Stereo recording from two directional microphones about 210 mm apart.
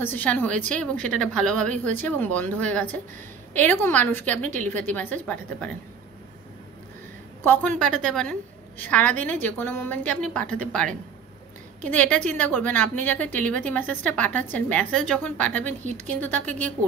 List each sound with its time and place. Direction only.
0.0 s a woman's voice: 10° left (ahead or behind)
4.4 s a woman's voice: 35° right (ahead or behind)
4.6 s a woman's voice: 10° left (ahead or behind)
7.8 s a woman's voice: 5° left (ahead or behind)
15.8 s a woman's voice: 35° right (ahead or behind)
16.1 s a woman's voice: 10° left (ahead or behind)